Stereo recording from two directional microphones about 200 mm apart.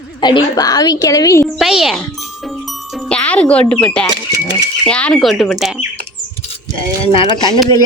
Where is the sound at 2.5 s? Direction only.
Centre (ahead or behind).